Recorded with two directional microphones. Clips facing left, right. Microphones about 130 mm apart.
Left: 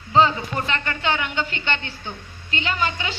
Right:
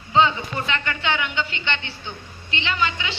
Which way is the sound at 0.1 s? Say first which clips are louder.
Left 1 dB; 40° left (ahead or behind).